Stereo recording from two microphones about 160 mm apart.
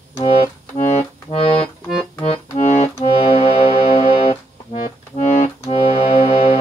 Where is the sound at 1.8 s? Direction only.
5° left (ahead or behind).